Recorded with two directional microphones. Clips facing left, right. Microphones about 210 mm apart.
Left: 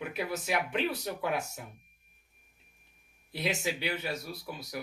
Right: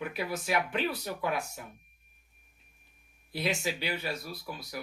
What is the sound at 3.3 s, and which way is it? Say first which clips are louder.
Speech: right 1 dB; 20° left (ahead or behind).